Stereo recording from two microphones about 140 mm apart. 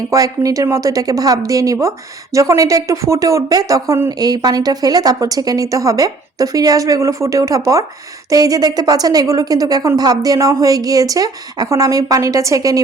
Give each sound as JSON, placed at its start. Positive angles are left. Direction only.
{"t": 0.1, "sound": "a woman's voice", "side_deg": -25}